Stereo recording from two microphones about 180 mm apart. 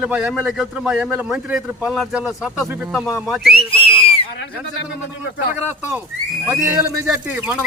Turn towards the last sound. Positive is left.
turn(degrees=-10)  # may be behind; listen again after turning